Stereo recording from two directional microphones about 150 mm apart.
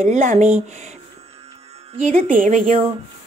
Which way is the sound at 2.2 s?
60° right (ahead or behind).